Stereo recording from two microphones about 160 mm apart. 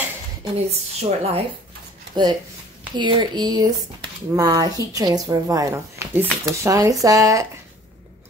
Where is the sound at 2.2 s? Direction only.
25° right (ahead or behind).